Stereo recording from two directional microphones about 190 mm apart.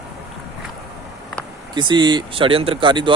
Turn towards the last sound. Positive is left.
turn(degrees=-25)  # may be behind; listen again after turning